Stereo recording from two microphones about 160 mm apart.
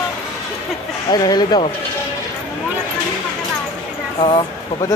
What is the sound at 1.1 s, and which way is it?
Speech, 25° left (ahead or behind).